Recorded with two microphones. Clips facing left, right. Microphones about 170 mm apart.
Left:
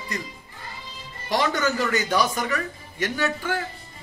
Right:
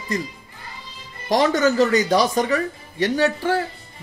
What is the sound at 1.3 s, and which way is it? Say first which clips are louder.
Speech: right 6 dB; 40° right (ahead or behind).